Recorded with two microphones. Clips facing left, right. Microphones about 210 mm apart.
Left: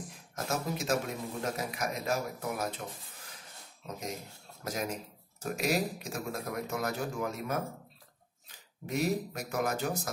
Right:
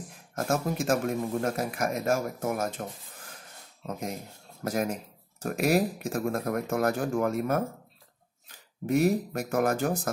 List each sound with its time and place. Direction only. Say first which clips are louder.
0.4 s speech: right 6 dB; 50° right (ahead or behind)
8.8 s speech: right 7 dB; 55° right (ahead or behind)